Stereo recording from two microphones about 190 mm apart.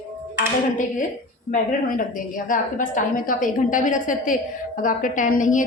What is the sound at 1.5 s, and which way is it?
A woman's voice, 45° left (ahead or behind).